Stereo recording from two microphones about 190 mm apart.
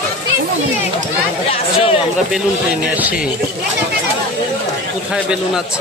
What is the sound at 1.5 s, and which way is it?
Speech, 30° left (ahead or behind).